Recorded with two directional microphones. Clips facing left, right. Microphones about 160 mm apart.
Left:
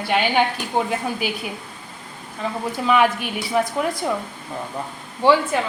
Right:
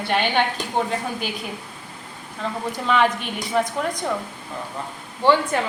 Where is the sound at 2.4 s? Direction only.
Centre (ahead or behind).